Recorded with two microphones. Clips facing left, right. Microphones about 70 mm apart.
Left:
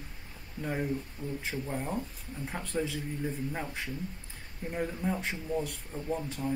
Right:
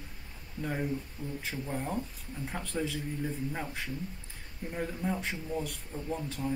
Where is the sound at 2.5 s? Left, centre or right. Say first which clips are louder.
Left 1 dB; centre.